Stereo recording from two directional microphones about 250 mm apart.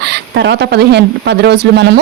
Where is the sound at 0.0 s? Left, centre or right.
Right.